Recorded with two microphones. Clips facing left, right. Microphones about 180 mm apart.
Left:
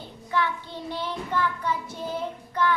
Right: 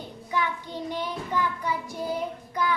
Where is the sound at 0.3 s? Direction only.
15° right (ahead or behind).